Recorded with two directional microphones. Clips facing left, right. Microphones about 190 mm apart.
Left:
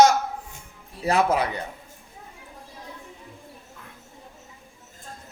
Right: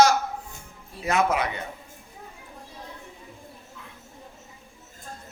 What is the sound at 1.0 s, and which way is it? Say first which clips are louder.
Speech: left 2 dB; 35° left (ahead or behind).